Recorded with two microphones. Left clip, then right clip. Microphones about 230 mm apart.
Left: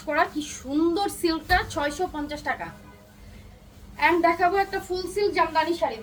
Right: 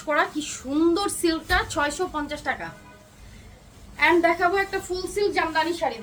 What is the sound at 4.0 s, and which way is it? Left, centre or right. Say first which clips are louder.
A woman's voice: right 1 dB; centre.